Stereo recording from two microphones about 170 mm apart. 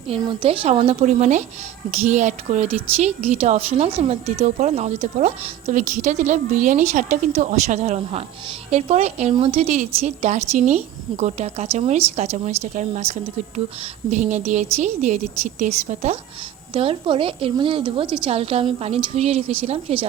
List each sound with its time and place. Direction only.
0.1 s a woman's voice: 35° right (ahead or behind)
16.7 s a woman's voice: 30° right (ahead or behind)